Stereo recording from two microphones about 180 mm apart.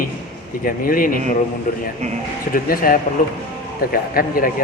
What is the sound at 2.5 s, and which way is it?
A man's voice, 50° left (ahead or behind).